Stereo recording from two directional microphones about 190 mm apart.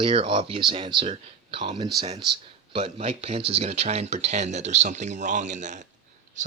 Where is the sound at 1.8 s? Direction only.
20° right (ahead or behind).